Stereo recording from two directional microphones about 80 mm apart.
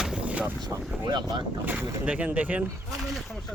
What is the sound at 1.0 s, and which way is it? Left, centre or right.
Speech, right.